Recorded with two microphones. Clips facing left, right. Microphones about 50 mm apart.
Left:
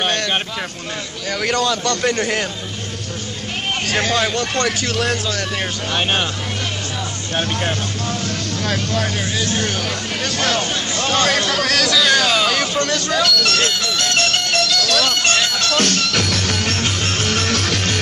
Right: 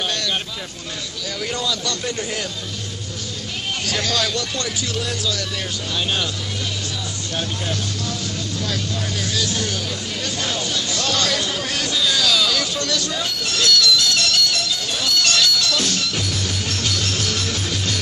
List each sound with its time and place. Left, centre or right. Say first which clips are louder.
0.0 s a sound: left 4 dB; left
1.4 s a man's voice: left 6 dB; left
3.8 s speech: left 4 dB; left
4.6 s speech: left 6 dB; left
7.3 s a man's voice: left 5 dB; left
9.3 s speech: left 3 dB; left
10.7 s speech: left 3 dB; left
11.3 s music: left 6 dB; left
12.1 s hubbub: left 4 dB; left
13.1 s speech: left 8 dB; left
13.6 s speech: right 1 dB; left
14.6 s bagpipes: left 7 dB; left
15.0 s music: left 2 dB; left